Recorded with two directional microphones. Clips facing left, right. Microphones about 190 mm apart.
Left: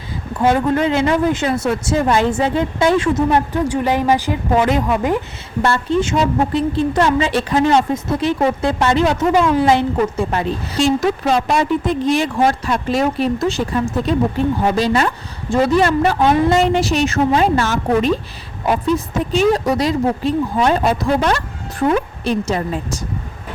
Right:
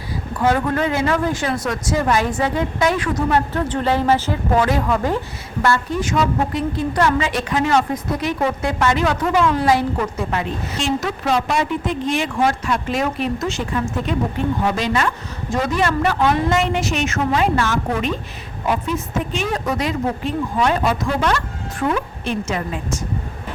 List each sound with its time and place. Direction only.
0.3 s a woman's voice: 25° left (ahead or behind)
3.2 s a woman's voice: 15° left (ahead or behind); by 23.0 s 35° left (ahead or behind)